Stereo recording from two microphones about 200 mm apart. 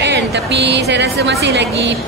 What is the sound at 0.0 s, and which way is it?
A woman's voice, 60° right (ahead or behind).